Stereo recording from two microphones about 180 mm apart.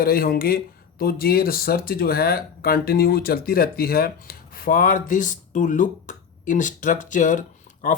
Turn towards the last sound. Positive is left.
turn(degrees=45)  # may be behind; listen again after turning